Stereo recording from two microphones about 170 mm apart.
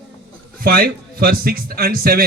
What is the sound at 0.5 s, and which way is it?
Speech, 60° right (ahead or behind).